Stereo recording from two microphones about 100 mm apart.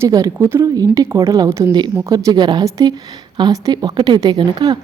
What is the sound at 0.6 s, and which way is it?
A woman's voice, 35° right (ahead or behind).